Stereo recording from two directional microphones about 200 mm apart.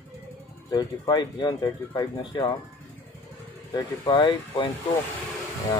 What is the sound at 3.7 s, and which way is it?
Speech, 20° left (ahead or behind).